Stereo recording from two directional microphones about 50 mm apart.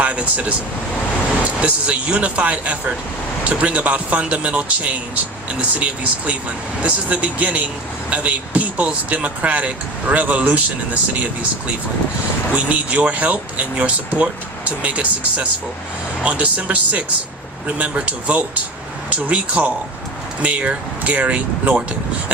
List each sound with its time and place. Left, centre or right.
0.0 s a man's voice: right
12.5 s speech: right